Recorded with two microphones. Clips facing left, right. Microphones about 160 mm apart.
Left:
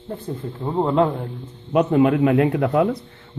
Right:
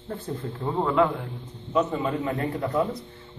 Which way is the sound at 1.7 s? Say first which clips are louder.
Left 9 dB; 70° left (ahead or behind).